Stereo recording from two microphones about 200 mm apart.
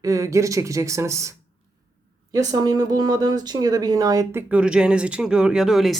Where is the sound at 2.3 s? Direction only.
20° right (ahead or behind); by 6.0 s centre (ahead or behind).